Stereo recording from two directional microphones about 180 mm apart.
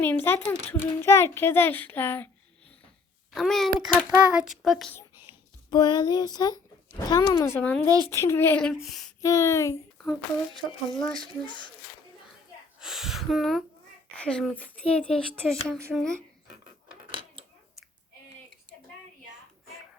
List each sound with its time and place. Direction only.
0.0 s a child's voice: 10° left (ahead or behind)
3.3 s speech: centre (ahead or behind)
5.3 s a sound: 25° left (ahead or behind)
5.7 s speech: 25° left (ahead or behind)
7.9 s speech: 20° right (ahead or behind)
8.1 s a child's voice: 15° left (ahead or behind)
9.2 s a child's voice: 15° left (ahead or behind)
10.5 s speech: centre (ahead or behind)
12.8 s speech: centre (ahead or behind)